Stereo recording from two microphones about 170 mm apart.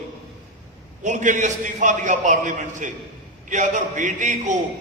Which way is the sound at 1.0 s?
45° right (ahead or behind).